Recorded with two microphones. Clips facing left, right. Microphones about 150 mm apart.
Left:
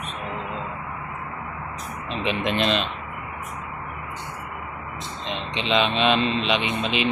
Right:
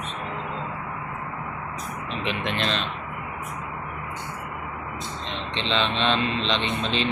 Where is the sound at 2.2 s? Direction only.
15° left (ahead or behind).